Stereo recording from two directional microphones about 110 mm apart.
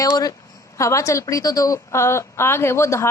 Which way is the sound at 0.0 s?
35° left (ahead or behind).